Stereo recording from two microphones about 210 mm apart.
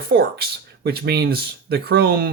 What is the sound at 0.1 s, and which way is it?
Speech, 55° right (ahead or behind).